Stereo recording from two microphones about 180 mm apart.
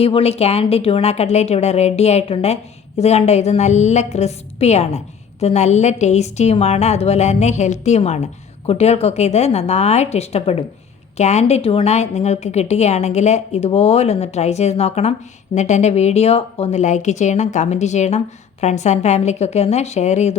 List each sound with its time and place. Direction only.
0.0 s a woman's voice: 35° left (ahead or behind)